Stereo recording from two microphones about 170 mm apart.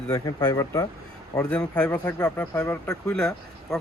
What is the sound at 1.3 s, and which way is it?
Speech, 5° left (ahead or behind).